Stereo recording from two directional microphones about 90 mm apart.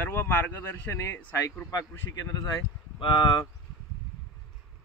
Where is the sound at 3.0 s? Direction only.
60° left (ahead or behind).